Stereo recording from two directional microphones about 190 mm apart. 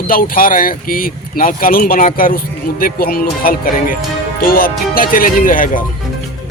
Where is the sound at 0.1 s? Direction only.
50° left (ahead or behind).